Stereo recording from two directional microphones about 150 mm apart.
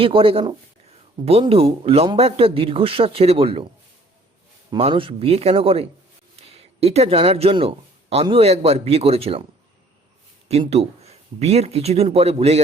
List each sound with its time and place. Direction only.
0.0 s speech: 35° right (ahead or behind)
4.8 s speech: 35° right (ahead or behind)
10.5 s speech: 45° right (ahead or behind)